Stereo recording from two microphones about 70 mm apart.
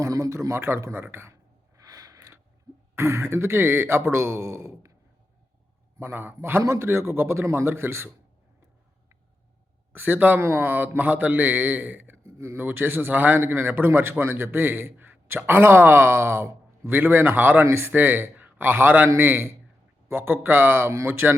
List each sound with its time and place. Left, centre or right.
0.0 s a man's voice: right
1.7 s a sound: right
2.9 s a man's voice: right
6.0 s a man's voice: right
6.6 s a man's voice: right
9.9 s a man's voice: right